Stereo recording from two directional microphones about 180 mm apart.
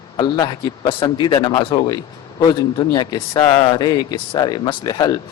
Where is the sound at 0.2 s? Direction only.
20° left (ahead or behind).